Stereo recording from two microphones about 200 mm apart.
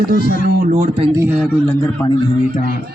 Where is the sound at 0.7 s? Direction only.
30° right (ahead or behind).